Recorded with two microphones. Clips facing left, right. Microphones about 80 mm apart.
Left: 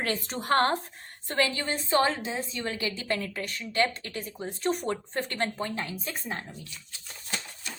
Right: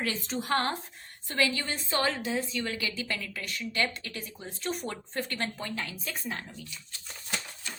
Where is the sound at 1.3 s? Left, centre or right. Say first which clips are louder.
Left 2 dB; left.